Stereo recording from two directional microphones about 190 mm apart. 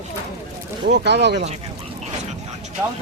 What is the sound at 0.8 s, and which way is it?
Speech, 60° right (ahead or behind).